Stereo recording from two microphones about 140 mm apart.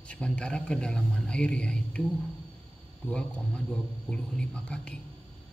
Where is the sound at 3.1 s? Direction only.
5° left (ahead or behind).